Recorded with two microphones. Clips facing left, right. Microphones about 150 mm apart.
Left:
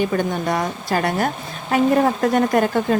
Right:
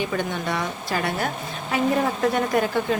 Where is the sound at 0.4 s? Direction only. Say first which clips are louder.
Left 5 dB; 45° left (ahead or behind).